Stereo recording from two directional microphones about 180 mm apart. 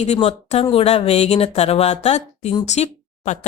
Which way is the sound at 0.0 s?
35° left (ahead or behind).